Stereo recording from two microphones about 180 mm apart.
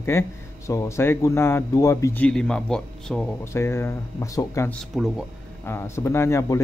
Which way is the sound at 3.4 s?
15° left (ahead or behind).